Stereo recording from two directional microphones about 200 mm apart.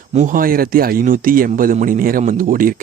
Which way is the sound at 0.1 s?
40° right (ahead or behind).